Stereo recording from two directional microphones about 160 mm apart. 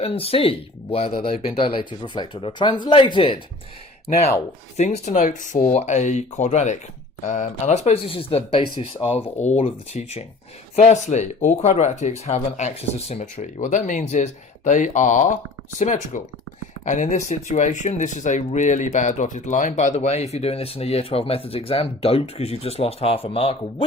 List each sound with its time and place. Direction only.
0.0 s speech: 35° left (ahead or behind)
4.8 s speech: 45° left (ahead or behind)
9.4 s speech: 45° left (ahead or behind)